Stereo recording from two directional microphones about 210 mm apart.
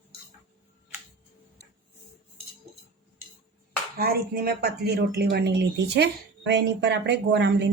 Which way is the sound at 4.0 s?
45° right (ahead or behind).